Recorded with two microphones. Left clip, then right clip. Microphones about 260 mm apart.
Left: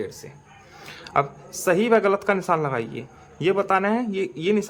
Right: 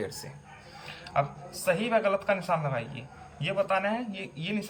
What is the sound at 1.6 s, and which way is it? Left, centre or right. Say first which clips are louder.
Speech: left 7 dB; centre.